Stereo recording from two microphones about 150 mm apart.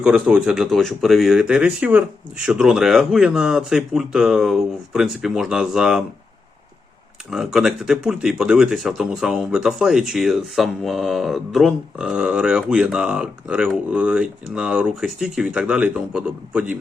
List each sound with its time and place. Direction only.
0.0 s speech: 5° right (ahead or behind)
7.3 s speech: 5° right (ahead or behind)